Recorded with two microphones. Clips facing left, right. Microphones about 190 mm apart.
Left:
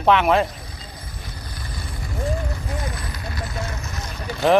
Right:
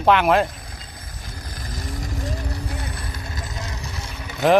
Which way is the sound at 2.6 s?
30° right (ahead or behind).